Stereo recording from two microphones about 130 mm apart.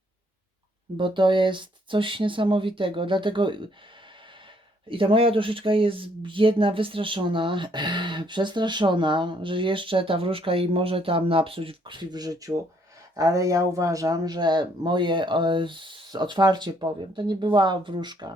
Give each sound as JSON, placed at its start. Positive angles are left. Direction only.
{"t": 0.9, "sound": "speech", "side_deg": -40}
{"t": 4.9, "sound": "speech", "side_deg": -45}